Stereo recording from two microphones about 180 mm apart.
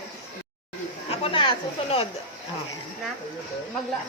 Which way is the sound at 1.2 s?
30° left (ahead or behind).